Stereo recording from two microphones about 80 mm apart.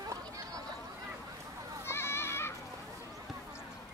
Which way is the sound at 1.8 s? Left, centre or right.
Left.